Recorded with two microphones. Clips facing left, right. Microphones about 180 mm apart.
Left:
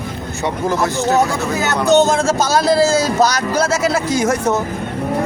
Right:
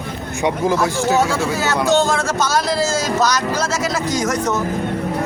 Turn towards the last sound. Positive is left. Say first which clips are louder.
# left 3 dB
turn(degrees=30)  # may be behind; listen again after turning